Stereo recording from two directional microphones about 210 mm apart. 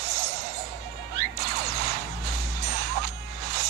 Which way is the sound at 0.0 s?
50° right (ahead or behind).